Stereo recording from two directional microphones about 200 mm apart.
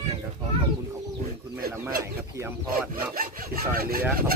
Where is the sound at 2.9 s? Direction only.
45° right (ahead or behind).